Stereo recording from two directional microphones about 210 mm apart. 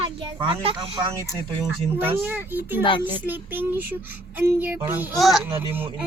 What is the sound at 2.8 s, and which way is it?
Speech, 20° left (ahead or behind).